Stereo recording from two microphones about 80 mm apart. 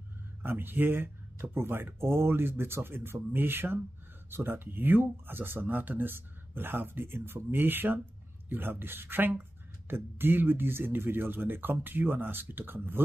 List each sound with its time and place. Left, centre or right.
0.4 s speech: right